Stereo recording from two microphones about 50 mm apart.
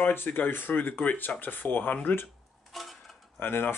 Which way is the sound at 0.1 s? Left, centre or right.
Left.